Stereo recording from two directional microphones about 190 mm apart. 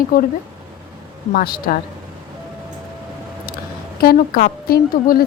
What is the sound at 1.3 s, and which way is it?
Speech, 50° left (ahead or behind).